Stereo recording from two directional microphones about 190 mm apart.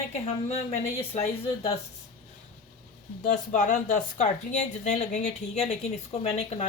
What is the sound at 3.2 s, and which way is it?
Speech, 40° left (ahead or behind).